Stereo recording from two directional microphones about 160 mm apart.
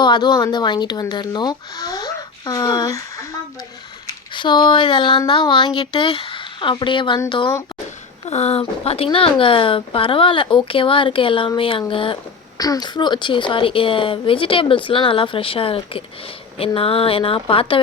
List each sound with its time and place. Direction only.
0.0 s speech: 25° left (ahead or behind)
4.4 s speech: 30° left (ahead or behind)